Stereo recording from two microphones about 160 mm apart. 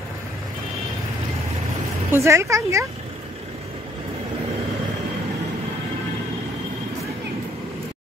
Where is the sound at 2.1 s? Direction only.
15° right (ahead or behind).